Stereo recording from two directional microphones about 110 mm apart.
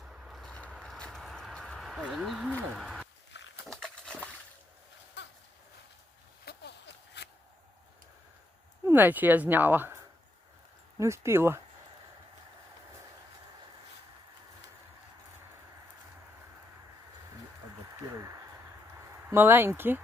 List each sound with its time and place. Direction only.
0.0 s vehicle: 5° right (ahead or behind)
0.8 s a sound: 5° left (ahead or behind)
2.2 s speech: centre (ahead or behind)
2.7 s a sound: centre (ahead or behind)
8.9 s speech: 15° right (ahead or behind)
19.3 s speech: 20° right (ahead or behind)